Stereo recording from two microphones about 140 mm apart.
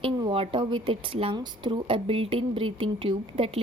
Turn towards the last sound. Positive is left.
turn(degrees=-40)  # may be behind; listen again after turning